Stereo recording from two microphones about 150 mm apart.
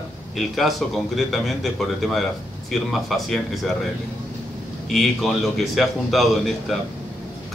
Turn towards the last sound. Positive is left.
turn(degrees=0)  # may be behind; listen again after turning